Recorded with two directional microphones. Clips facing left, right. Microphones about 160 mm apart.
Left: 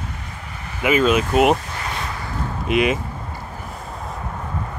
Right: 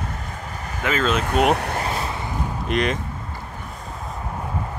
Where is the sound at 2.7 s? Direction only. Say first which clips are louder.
Left 4 dB; 10° left (ahead or behind).